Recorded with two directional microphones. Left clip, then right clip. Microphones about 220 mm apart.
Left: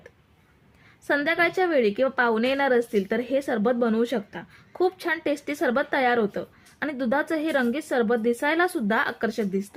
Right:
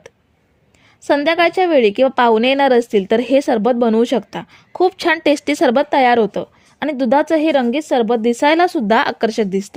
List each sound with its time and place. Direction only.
1.0 s a woman's voice: 35° right (ahead or behind)